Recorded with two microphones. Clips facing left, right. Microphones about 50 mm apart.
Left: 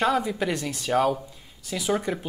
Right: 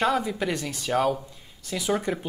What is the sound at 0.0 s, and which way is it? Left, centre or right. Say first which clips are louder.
Speech: left 1 dB; centre.